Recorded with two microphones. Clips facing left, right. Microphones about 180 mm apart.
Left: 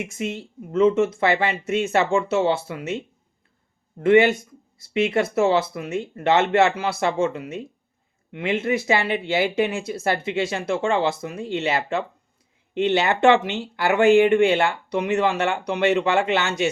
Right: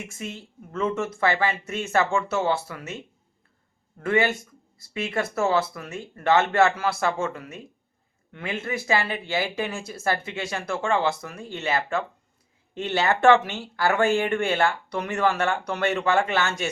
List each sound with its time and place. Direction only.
0.0 s speech: 20° left (ahead or behind)